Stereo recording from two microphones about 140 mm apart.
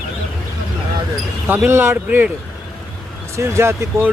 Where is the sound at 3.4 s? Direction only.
20° right (ahead or behind).